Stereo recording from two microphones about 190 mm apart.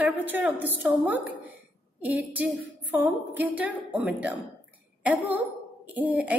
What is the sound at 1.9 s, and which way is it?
A woman's voice, 10° right (ahead or behind).